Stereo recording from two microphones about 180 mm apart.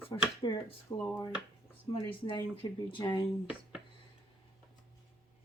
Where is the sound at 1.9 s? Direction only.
30° left (ahead or behind).